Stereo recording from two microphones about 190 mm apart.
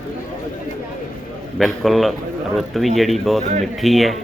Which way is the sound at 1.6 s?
Centre (ahead or behind).